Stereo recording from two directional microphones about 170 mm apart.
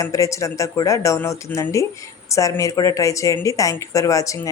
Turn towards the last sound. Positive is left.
turn(degrees=20)  # may be behind; listen again after turning